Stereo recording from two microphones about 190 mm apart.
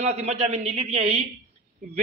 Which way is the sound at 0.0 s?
35° right (ahead or behind).